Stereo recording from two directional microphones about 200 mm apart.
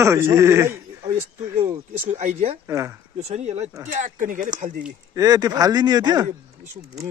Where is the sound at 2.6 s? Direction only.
15° right (ahead or behind).